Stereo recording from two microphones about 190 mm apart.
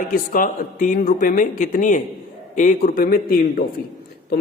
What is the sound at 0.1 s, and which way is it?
A man's voice, 45° left (ahead or behind).